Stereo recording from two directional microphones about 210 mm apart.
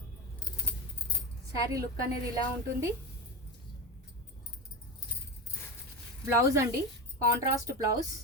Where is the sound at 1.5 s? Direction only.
15° right (ahead or behind).